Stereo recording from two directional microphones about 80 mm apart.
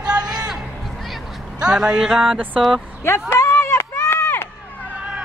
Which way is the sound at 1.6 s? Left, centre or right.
Centre.